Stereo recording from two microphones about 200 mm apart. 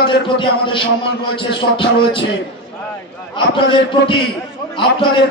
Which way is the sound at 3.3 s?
25° left (ahead or behind).